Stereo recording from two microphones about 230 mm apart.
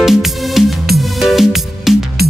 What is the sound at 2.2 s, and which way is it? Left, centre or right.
Music, right.